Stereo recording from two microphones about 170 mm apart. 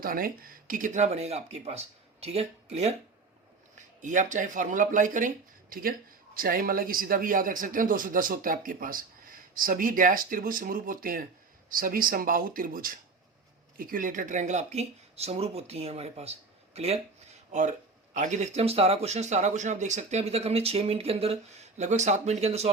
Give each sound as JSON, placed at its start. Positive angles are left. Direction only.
{"t": 0.0, "sound": "speech", "side_deg": -55}